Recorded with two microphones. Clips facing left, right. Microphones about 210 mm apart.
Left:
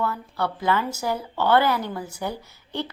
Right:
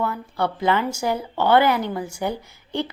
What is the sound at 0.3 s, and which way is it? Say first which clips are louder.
A woman's voice: right 3 dB; 25° right (ahead or behind).